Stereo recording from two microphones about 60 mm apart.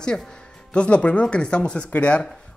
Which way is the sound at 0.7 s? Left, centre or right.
Left.